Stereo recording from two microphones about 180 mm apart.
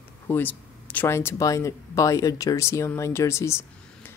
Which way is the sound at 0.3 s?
10° left (ahead or behind).